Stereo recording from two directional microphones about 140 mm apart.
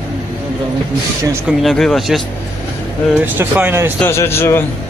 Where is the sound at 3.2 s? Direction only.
15° right (ahead or behind).